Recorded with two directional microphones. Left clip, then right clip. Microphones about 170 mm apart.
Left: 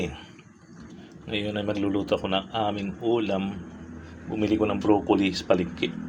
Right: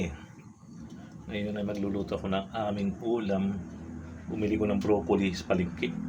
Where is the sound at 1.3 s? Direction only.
30° left (ahead or behind).